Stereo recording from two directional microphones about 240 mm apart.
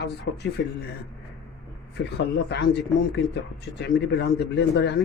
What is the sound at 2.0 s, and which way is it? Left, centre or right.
Speech, left.